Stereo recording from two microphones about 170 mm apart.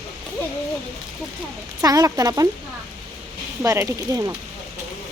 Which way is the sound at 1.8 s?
20° right (ahead or behind).